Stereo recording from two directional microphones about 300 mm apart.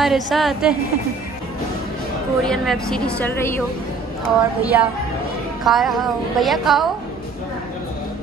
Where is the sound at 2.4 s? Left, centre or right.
Centre.